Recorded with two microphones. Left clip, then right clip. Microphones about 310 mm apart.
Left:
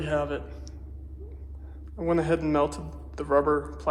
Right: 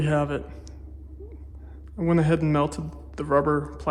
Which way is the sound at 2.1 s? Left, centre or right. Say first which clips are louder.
Right 1 dB; right.